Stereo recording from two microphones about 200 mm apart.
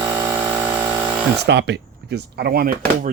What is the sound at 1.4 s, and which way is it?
Speech, 55° right (ahead or behind).